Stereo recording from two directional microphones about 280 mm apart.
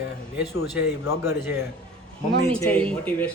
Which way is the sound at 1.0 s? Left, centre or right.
Centre.